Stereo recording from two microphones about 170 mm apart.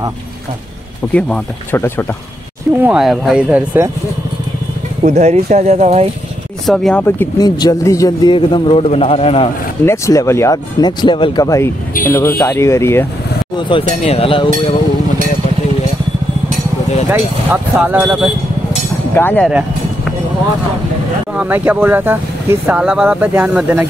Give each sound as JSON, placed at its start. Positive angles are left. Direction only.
{"t": 1.1, "sound": "speech", "side_deg": 10}
{"t": 2.8, "sound": "speech", "side_deg": -5}
{"t": 5.0, "sound": "speech", "side_deg": -45}
{"t": 6.6, "sound": "speech", "side_deg": 0}
{"t": 7.3, "sound": "a man's voice", "side_deg": 25}
{"t": 9.8, "sound": "a man's voice", "side_deg": 15}
{"t": 13.6, "sound": "a man's voice", "side_deg": 30}
{"t": 17.1, "sound": "speech", "side_deg": -10}
{"t": 19.1, "sound": "speech", "side_deg": 10}
{"t": 21.4, "sound": "speech", "side_deg": -10}